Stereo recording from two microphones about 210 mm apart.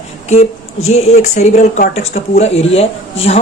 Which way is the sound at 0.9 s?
30° left (ahead or behind).